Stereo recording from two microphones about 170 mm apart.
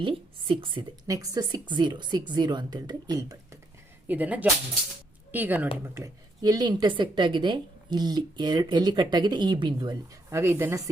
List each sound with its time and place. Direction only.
0.0 s a woman's voice: 30° right (ahead or behind)
4.1 s a woman's voice: 10° right (ahead or behind); by 10.0 s 25° right (ahead or behind)
10.3 s speech: 15° right (ahead or behind)